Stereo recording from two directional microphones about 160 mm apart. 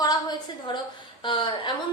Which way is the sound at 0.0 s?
25° left (ahead or behind).